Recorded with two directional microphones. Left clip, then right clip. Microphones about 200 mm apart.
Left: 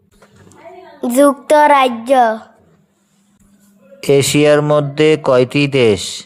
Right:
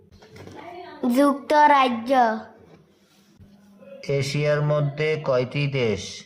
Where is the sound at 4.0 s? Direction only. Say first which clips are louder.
Left 14 dB; 45° left (ahead or behind).